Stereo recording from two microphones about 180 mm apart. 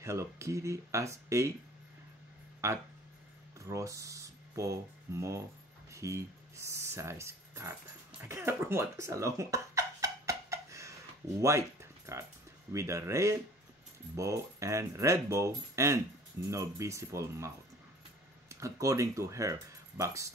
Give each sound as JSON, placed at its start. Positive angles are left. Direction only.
{"t": 0.0, "sound": "speech", "side_deg": -15}
{"t": 2.6, "sound": "speech", "side_deg": -15}
{"t": 8.2, "sound": "a sound", "side_deg": -15}
{"t": 11.4, "sound": "speech", "side_deg": -15}
{"t": 18.5, "sound": "speech", "side_deg": -15}